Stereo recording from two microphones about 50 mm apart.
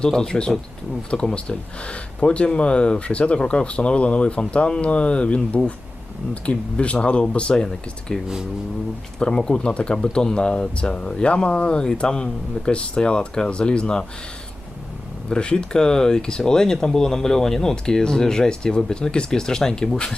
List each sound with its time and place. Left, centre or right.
0.0 s speech: centre
15.3 s speech: centre